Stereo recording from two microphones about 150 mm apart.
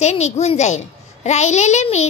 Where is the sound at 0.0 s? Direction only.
50° left (ahead or behind).